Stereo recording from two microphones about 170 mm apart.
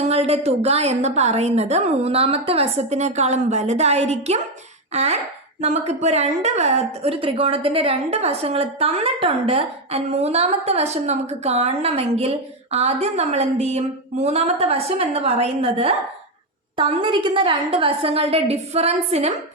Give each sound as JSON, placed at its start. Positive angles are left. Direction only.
{"t": 0.0, "sound": "speech", "side_deg": -40}